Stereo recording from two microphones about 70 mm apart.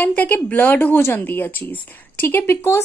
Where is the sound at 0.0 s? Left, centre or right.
Left.